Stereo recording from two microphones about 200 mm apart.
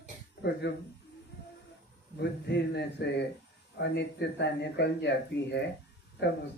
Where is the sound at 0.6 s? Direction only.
60° left (ahead or behind).